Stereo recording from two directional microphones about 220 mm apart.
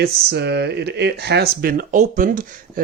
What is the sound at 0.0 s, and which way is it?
Speech, 50° right (ahead or behind).